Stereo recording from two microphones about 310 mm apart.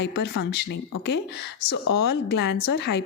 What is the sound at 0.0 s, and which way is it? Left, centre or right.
A woman's voice, left.